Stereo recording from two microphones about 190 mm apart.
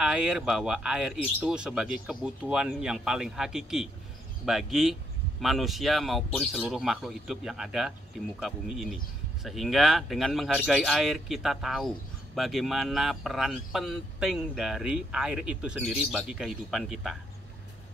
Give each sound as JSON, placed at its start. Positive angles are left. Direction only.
{"t": 0.0, "sound": "speech", "side_deg": -5}